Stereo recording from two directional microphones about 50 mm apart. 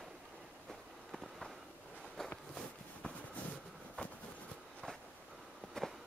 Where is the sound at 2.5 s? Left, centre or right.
Centre.